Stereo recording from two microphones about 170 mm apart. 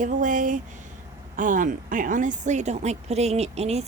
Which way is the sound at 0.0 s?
50° right (ahead or behind).